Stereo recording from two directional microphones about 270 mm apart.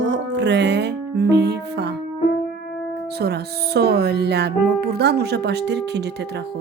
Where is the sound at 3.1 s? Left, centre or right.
Right.